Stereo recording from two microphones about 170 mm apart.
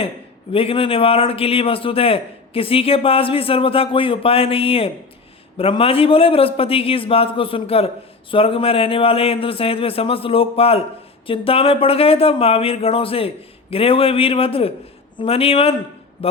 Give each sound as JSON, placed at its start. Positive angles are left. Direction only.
{"t": 0.5, "sound": "a man's voice", "side_deg": 35}